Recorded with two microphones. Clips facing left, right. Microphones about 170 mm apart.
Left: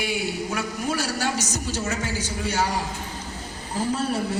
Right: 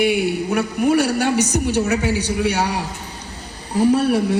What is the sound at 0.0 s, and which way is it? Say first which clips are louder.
A woman's voice: right 9 dB; 60° right (ahead or behind).